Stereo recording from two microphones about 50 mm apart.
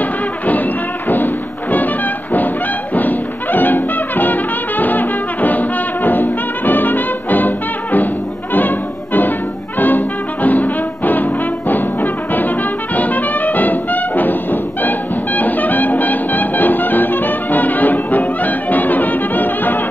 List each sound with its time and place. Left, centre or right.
0.5 s music: left
8.5 s brass instrument: left
9.8 s music: left